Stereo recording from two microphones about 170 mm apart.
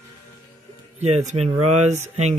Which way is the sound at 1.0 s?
40° right (ahead or behind).